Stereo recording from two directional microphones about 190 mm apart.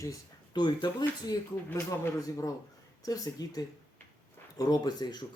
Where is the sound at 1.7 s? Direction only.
10° left (ahead or behind).